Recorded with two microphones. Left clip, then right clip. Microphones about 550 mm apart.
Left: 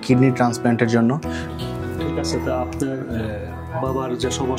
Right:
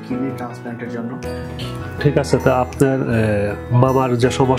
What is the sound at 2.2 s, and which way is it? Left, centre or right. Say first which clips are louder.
Speech: right 7 dB; right.